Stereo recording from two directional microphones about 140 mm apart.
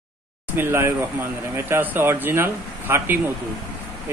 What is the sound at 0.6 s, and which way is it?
Speech, 15° right (ahead or behind).